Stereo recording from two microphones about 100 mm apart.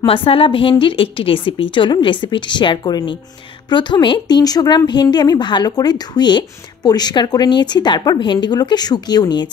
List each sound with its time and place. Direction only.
0.0 s a woman's voice: 65° left (ahead or behind); by 9.5 s 45° left (ahead or behind)